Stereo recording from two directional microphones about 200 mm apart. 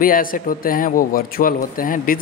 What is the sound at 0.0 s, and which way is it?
A man's voice, 45° left (ahead or behind).